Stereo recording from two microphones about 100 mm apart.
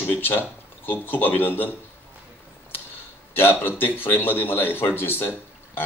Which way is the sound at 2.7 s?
20° left (ahead or behind).